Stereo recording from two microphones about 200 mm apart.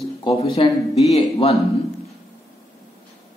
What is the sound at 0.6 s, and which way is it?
Speech, 25° left (ahead or behind).